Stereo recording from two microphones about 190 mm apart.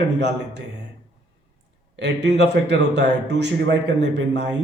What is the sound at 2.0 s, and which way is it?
Speech, 65° right (ahead or behind).